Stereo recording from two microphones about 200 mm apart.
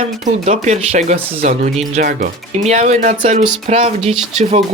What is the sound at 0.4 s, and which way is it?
Speech, 35° right (ahead or behind).